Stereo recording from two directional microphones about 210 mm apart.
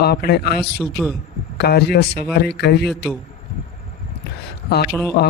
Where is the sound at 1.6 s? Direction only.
50° left (ahead or behind).